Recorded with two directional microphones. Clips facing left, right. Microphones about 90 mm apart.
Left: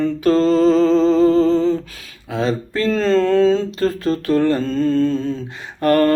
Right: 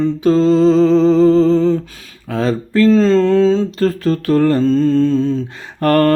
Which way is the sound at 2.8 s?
30° right (ahead or behind).